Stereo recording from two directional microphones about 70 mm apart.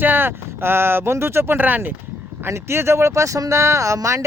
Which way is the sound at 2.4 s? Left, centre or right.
Right.